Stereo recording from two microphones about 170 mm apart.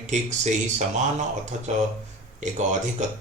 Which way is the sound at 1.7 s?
45° right (ahead or behind).